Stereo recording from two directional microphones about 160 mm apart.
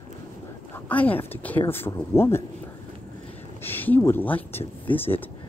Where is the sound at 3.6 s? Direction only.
10° left (ahead or behind).